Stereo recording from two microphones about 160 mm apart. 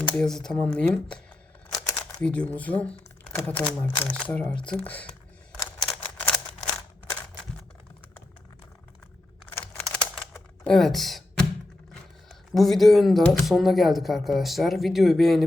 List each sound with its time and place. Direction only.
0.1 s speech: 5° left (ahead or behind)
2.2 s speech: 10° left (ahead or behind)
4.7 s a sound: 10° left (ahead or behind)
5.8 s typewriter: 5° left (ahead or behind)
6.6 s a sound: 20° left (ahead or behind)
9.6 s computer keyboard: 10° left (ahead or behind)
10.7 s speech: centre (ahead or behind)